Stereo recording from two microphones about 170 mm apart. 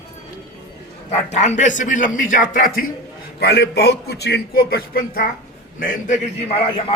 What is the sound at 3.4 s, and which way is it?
A man's voice, 70° left (ahead or behind).